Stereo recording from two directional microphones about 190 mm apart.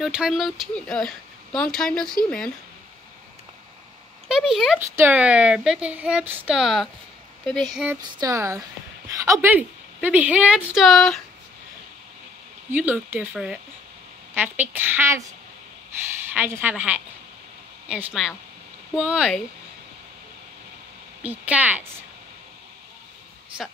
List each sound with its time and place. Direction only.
0.0 s speech: centre (ahead or behind)
4.3 s a woman's voice: 5° right (ahead or behind)
8.0 s a woman's voice: 20° right (ahead or behind); by 11.1 s centre (ahead or behind)
12.7 s a woman's voice: 10° right (ahead or behind)
16.3 s a woman's voice: 10° right (ahead or behind)
21.2 s a woman's voice: 10° right (ahead or behind)